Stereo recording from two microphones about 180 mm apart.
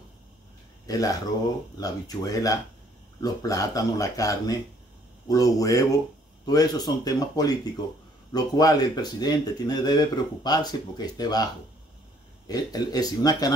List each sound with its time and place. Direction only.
0.8 s speech: 20° left (ahead or behind)